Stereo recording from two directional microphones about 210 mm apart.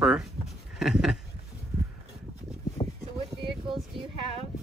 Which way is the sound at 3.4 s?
25° right (ahead or behind).